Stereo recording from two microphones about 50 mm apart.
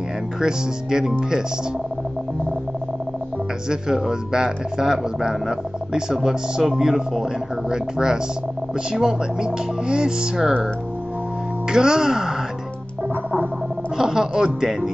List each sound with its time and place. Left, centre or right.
0.4 s speech: centre
3.6 s speech: centre
11.7 s speech: centre
13.9 s speech: centre